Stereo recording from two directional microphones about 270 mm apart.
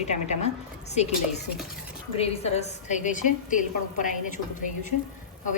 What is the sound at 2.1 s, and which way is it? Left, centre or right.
A woman's voice, left.